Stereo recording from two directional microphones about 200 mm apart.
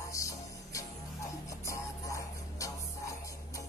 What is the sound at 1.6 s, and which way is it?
Music, 15° left (ahead or behind).